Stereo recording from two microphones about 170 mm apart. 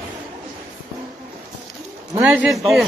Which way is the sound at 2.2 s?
10° right (ahead or behind).